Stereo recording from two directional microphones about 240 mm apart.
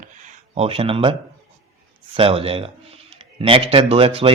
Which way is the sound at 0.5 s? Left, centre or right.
Right.